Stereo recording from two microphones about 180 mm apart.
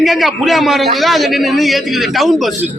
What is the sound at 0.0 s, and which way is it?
A man's voice, centre (ahead or behind).